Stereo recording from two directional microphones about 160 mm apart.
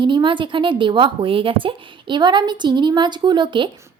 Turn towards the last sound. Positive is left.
turn(degrees=-30)  # may be behind; listen again after turning